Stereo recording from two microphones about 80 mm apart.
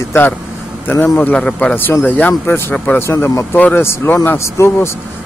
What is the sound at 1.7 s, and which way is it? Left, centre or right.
Speech, left.